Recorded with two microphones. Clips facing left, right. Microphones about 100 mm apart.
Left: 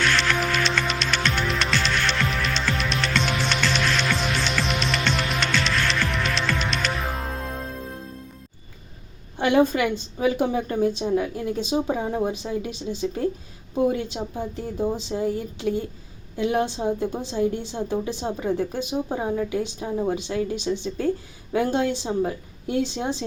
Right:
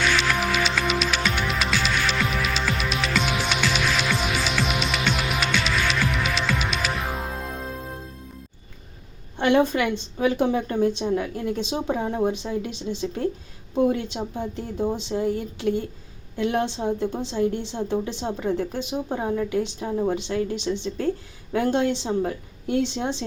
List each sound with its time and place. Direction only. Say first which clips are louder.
0.0 s music: even; 5° right (ahead or behind)
9.4 s a woman's voice: even; 5° left (ahead or behind)